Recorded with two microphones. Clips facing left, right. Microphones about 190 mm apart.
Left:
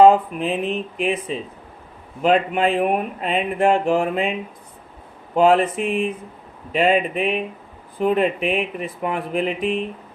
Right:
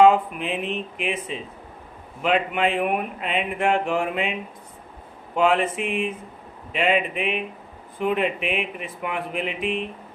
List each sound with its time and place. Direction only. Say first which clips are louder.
0.0 s speech: left 3 dB; 35° left (ahead or behind)